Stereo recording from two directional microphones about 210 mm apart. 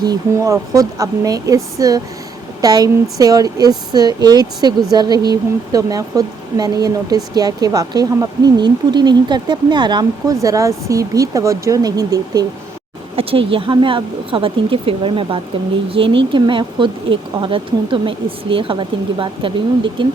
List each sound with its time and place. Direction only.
0.0 s speech: 15° right (ahead or behind)